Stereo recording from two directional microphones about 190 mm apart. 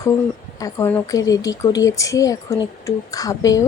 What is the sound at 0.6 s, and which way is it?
A woman's voice, 10° left (ahead or behind).